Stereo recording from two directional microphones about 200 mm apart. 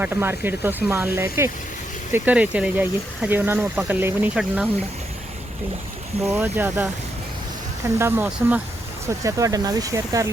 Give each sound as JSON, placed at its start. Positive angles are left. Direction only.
{"t": 0.0, "sound": "speech", "side_deg": -10}
{"t": 6.3, "sound": "speech", "side_deg": -10}
{"t": 7.9, "sound": "speech", "side_deg": -10}